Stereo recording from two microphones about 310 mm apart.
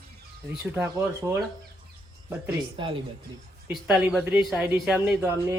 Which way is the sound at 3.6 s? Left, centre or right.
Centre.